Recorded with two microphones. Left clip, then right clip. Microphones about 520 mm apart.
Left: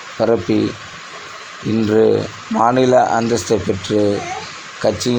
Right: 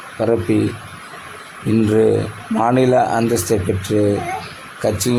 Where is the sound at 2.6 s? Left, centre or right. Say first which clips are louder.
Left 2 dB; right.